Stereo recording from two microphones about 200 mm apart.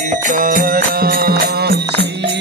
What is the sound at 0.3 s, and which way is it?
Music, 40° right (ahead or behind).